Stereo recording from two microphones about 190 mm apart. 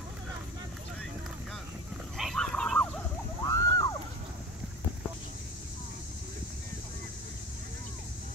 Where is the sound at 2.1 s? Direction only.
Centre (ahead or behind).